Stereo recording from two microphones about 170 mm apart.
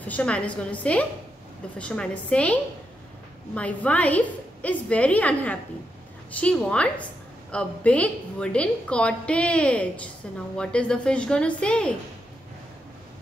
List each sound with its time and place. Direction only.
0.0 s a woman's voice: 10° left (ahead or behind)
3.5 s a woman's voice: 10° left (ahead or behind)